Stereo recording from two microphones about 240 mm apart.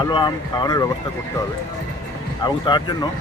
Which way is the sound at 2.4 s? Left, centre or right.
Centre.